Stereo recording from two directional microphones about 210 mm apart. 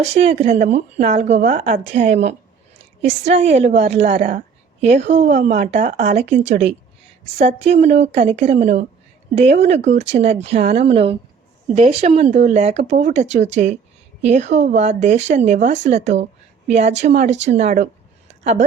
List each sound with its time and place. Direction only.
0.0 s speech: 30° right (ahead or behind)
4.9 s speech: 60° right (ahead or behind)
5.3 s speech: 35° right (ahead or behind)